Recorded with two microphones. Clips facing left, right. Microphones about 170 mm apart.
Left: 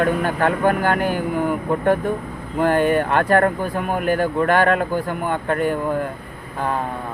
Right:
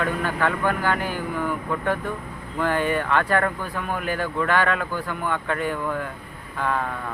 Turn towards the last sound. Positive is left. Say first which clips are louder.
# left 2 dB
turn(degrees=35)  # may be behind; listen again after turning